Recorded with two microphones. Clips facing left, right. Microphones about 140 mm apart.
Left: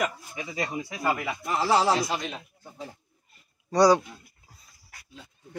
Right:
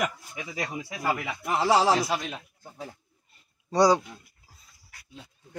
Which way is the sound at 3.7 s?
20° right (ahead or behind).